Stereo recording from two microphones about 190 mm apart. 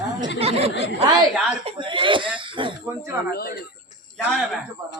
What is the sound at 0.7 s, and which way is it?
Speech, 65° left (ahead or behind).